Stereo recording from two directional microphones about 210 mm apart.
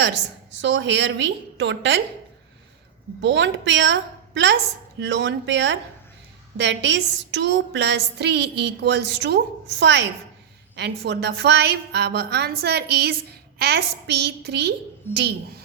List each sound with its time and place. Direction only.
0.0 s a woman's voice: 55° right (ahead or behind)
3.2 s a woman's voice: 60° right (ahead or behind)